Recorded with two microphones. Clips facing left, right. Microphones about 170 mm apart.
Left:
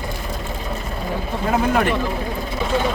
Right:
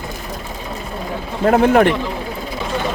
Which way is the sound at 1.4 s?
60° right (ahead or behind).